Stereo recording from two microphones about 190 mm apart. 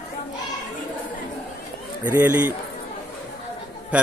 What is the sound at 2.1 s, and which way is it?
Speech, 10° right (ahead or behind).